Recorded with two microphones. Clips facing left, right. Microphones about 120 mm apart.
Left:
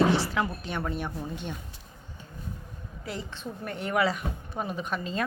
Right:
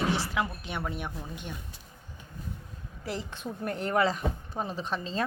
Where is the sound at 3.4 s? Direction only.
10° right (ahead or behind).